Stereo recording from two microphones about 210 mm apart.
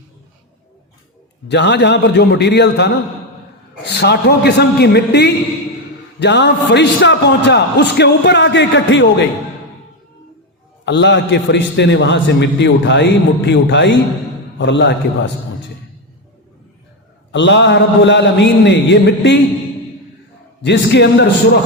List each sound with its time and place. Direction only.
1.5 s a man's voice: 55° left (ahead or behind)
10.8 s a man's voice: 55° left (ahead or behind)
17.3 s a man's voice: 60° left (ahead or behind)
20.6 s a man's voice: 55° left (ahead or behind)